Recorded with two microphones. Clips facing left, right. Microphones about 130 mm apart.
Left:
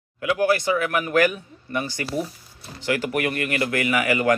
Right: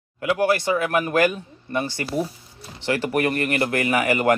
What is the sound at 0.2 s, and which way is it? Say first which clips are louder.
A man's voice: even; 30° right (ahead or behind).